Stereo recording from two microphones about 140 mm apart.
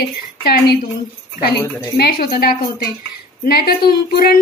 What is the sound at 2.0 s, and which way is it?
Speech, 90° left.